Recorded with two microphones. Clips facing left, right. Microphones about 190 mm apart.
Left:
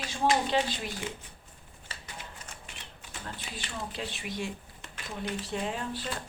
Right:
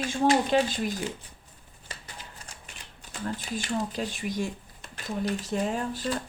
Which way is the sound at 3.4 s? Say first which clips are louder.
Right 9 dB; 45° right (ahead or behind).